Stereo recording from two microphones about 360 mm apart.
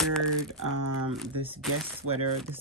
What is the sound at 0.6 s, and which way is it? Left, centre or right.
Speech, right.